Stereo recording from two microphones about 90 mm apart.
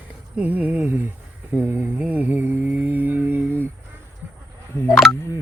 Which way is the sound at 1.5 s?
25° right (ahead or behind).